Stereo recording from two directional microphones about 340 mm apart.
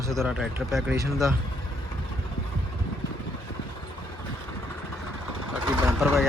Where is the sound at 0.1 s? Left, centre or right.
Centre.